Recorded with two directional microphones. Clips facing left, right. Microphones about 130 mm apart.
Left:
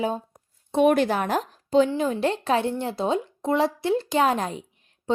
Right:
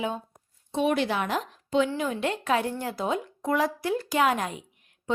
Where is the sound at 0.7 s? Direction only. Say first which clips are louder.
Left 6 dB; 55° left (ahead or behind); by 5.2 s 30° left (ahead or behind).